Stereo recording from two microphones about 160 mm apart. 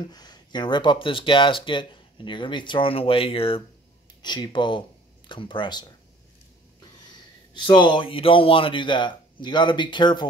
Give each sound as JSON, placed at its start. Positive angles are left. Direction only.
{"t": 0.1, "sound": "a man's voice", "side_deg": 25}
{"t": 7.5, "sound": "a man's voice", "side_deg": 30}